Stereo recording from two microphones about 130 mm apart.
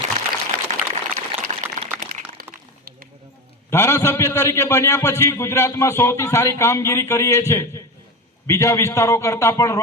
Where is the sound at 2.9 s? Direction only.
90° right.